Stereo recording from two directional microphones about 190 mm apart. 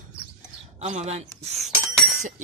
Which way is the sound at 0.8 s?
35° right (ahead or behind).